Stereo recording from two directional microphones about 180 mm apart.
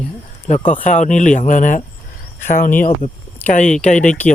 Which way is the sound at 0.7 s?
45° left (ahead or behind).